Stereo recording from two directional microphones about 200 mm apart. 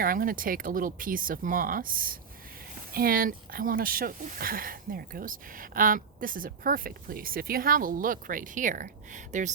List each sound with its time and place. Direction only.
0.0 s speech: 45° right (ahead or behind)